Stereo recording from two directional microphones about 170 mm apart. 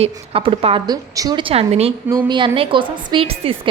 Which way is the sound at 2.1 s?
25° right (ahead or behind).